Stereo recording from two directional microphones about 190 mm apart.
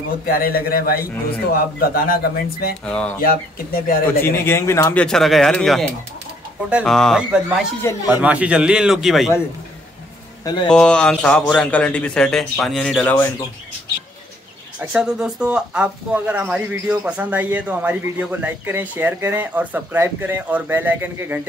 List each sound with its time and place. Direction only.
0.3 s speech: 50° left (ahead or behind)
2.8 s a man's voice: 5° left (ahead or behind)
3.2 s speech: 50° left (ahead or behind)
4.0 s a man's voice: 10° left (ahead or behind)
10.7 s a man's voice: 5° left (ahead or behind)
14.8 s speech: 5° right (ahead or behind)